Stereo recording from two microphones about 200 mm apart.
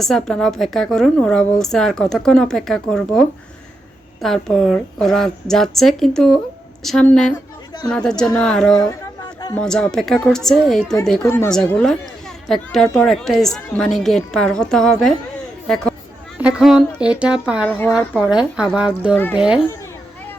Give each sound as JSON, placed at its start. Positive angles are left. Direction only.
{"t": 0.0, "sound": "a woman's voice", "side_deg": 5}
{"t": 8.9, "sound": "a sound", "side_deg": 20}
{"t": 9.6, "sound": "a woman's voice", "side_deg": 5}
{"t": 17.7, "sound": "a woman's voice", "side_deg": 10}
{"t": 17.9, "sound": "a woman's voice", "side_deg": -5}